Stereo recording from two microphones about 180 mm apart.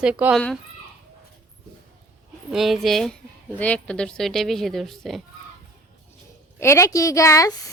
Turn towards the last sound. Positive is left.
turn(degrees=20)  # may be behind; listen again after turning